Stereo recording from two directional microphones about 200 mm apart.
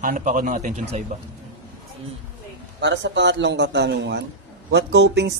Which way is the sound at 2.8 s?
60° right (ahead or behind).